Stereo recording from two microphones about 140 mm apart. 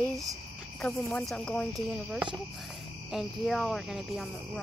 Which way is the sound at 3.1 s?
Centre (ahead or behind).